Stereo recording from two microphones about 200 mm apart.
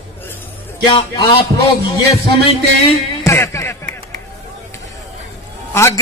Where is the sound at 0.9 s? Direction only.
25° left (ahead or behind).